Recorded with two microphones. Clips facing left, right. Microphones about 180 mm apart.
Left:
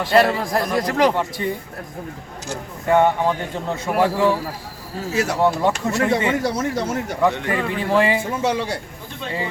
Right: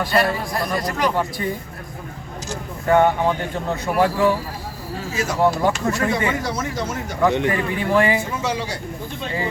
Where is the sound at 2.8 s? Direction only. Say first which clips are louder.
Even; 25° left (ahead or behind).